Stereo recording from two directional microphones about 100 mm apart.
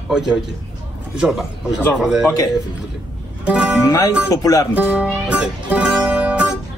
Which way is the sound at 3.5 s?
15° right (ahead or behind).